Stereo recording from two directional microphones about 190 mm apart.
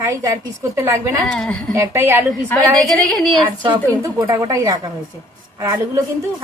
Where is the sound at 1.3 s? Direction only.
5° left (ahead or behind).